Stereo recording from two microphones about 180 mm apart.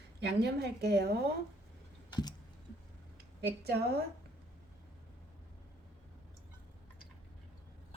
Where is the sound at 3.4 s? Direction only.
60° right (ahead or behind).